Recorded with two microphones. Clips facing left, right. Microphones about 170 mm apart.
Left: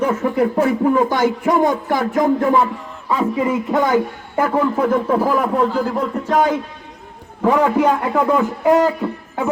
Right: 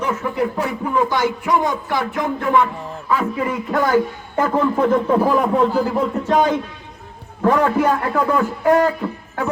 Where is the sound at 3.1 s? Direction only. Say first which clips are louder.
Left 3 dB; 25° left (ahead or behind).